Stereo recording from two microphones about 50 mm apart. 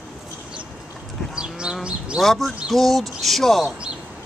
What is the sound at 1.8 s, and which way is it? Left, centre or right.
Speech, right.